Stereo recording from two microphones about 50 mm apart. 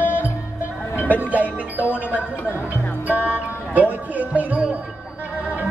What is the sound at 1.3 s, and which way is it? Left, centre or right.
Music, right.